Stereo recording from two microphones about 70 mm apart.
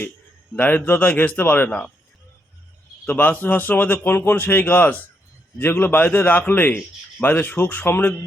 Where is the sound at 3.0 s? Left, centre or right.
Left.